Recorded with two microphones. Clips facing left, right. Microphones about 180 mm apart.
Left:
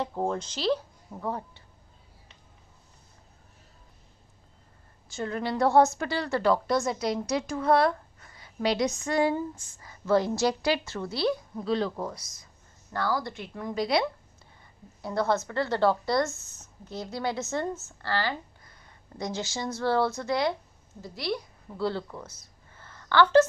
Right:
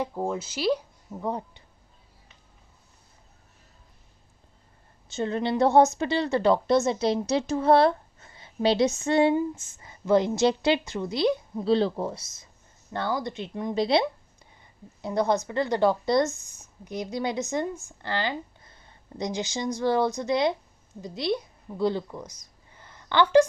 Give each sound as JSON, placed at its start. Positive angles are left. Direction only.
{"t": 0.0, "sound": "a woman's voice", "side_deg": -5}
{"t": 5.0, "sound": "a woman's voice", "side_deg": -25}